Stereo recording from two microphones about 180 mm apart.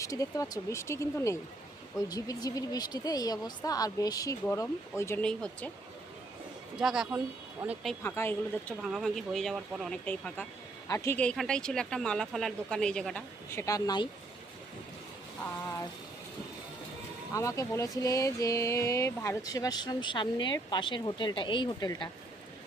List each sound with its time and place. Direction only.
0.0 s speech: 20° left (ahead or behind)
6.7 s speech: 5° right (ahead or behind)
8.0 s speech: 10° left (ahead or behind)
8.8 s speech: centre (ahead or behind); by 14.1 s 20° left (ahead or behind)
17.3 s speech: 20° left (ahead or behind)